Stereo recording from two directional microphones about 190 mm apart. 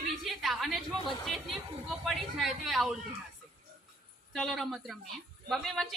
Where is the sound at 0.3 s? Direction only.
Centre (ahead or behind).